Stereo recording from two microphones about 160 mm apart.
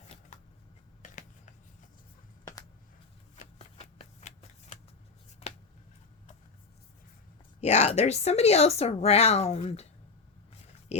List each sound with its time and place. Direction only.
1.0 s finger snapping: 50° left (ahead or behind)
3.3 s shuffling cards: 45° left (ahead or behind)
7.6 s a woman's voice: 40° left (ahead or behind)